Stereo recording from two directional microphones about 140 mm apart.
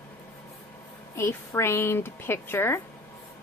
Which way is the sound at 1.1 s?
20° left (ahead or behind).